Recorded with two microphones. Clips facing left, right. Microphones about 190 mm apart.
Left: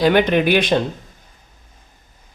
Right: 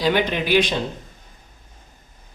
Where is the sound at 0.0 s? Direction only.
55° left (ahead or behind).